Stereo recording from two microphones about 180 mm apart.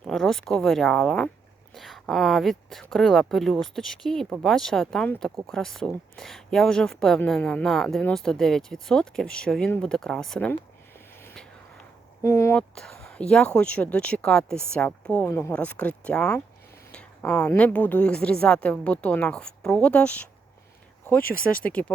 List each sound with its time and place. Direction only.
0.0 s speech: centre (ahead or behind)
12.2 s speech: 15° left (ahead or behind)
12.7 s speech: 5° left (ahead or behind)
16.9 s a sound: 5° left (ahead or behind)
17.5 s speech: 10° left (ahead or behind)
21.2 s speech: 55° left (ahead or behind)
21.6 s speech: 5° left (ahead or behind)